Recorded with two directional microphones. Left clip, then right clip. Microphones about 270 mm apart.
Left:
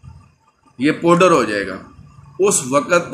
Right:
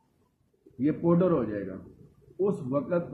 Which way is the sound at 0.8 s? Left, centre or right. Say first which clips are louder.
Left 12 dB; centre.